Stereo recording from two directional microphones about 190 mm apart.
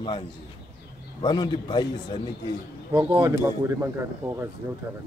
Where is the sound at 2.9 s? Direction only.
15° right (ahead or behind).